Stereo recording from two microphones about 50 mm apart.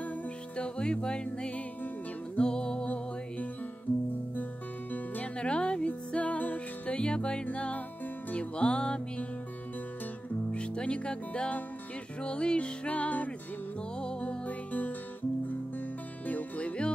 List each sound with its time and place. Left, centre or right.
0.6 s music: centre
4.9 s music: left
10.5 s music: left
13.9 s music: centre
16.3 s music: left